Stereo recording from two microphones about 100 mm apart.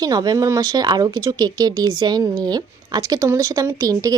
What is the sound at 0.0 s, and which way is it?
A woman's voice, 40° right (ahead or behind).